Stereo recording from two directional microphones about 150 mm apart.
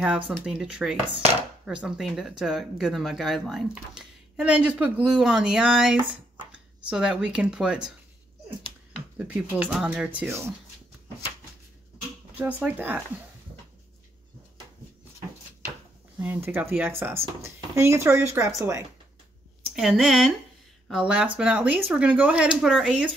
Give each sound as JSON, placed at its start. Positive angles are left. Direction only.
{"t": 0.5, "sound": "speech", "side_deg": -5}
{"t": 9.2, "sound": "speech", "side_deg": -10}
{"t": 12.4, "sound": "speech", "side_deg": -10}
{"t": 16.2, "sound": "speech", "side_deg": -10}
{"t": 19.7, "sound": "speech", "side_deg": 0}